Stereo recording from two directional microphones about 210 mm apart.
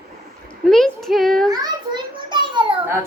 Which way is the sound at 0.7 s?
Centre (ahead or behind).